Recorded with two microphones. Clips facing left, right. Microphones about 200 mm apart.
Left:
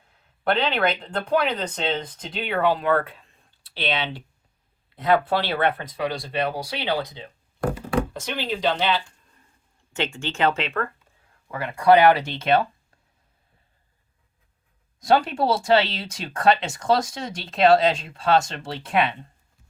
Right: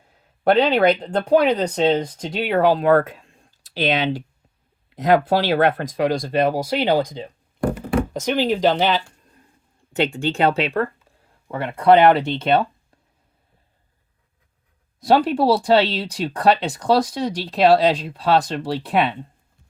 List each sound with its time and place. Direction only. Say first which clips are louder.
0.4 s speech: right 7 dB; 40° right (ahead or behind)
11.5 s speech: right 2 dB; centre (ahead or behind)
15.0 s speech: right 4 dB; centre (ahead or behind)